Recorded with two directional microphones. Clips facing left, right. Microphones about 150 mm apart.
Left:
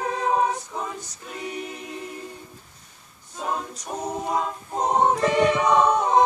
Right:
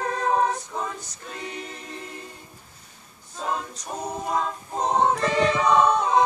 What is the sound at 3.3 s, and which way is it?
A capella, 5° left (ahead or behind).